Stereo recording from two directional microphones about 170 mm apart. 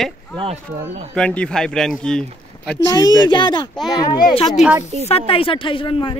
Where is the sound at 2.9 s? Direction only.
25° left (ahead or behind).